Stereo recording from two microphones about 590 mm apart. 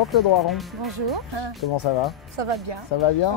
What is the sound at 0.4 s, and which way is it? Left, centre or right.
Speech, centre.